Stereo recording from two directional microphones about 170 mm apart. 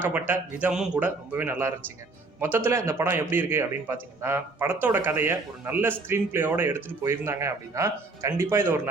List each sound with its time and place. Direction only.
0.0 s a man's voice: 10° right (ahead or behind)